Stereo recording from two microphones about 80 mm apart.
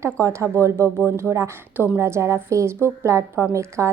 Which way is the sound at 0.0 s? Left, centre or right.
Right.